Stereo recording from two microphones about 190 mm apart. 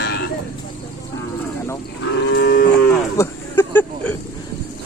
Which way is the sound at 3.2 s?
10° left (ahead or behind).